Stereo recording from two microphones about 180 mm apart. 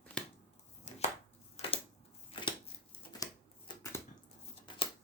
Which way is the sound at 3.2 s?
20° left (ahead or behind).